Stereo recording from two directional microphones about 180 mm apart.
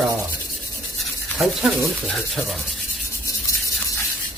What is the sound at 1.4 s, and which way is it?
Rub, centre (ahead or behind).